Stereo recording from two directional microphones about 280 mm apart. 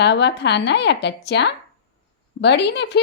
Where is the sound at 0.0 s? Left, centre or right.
Left.